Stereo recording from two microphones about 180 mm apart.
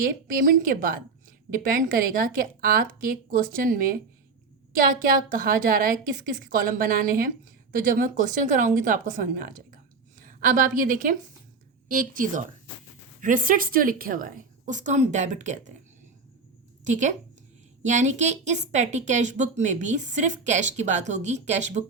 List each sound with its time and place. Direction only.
0.0 s a woman's voice: 50° right (ahead or behind)
5.3 s a woman's voice: 50° right (ahead or behind)
16.8 s a woman's voice: 40° right (ahead or behind)